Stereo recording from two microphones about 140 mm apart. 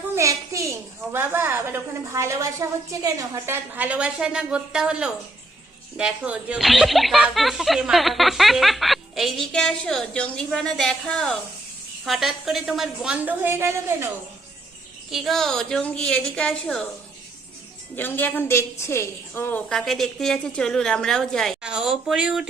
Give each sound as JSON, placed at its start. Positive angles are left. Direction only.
{"t": 0.1, "sound": "a child's voice", "side_deg": -20}
{"t": 15.1, "sound": "speech", "side_deg": 0}
{"t": 17.9, "sound": "a woman's voice", "side_deg": 15}
{"t": 19.6, "sound": "speech", "side_deg": 5}